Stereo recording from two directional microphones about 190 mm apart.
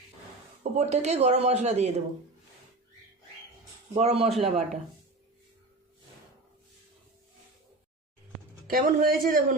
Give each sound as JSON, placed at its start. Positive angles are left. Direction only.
{"t": 0.6, "sound": "speech", "side_deg": -35}
{"t": 3.9, "sound": "speech", "side_deg": -30}
{"t": 8.7, "sound": "a man's voice", "side_deg": -50}